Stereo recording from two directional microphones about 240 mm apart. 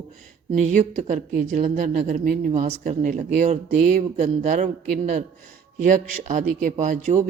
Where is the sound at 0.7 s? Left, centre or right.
Right.